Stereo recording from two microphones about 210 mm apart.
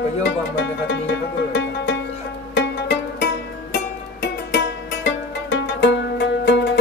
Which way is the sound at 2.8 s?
55° left (ahead or behind).